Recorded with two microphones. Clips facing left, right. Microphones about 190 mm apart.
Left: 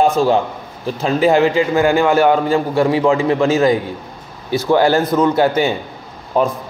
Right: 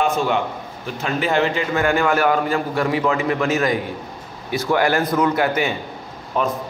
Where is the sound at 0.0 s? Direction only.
35° left (ahead or behind).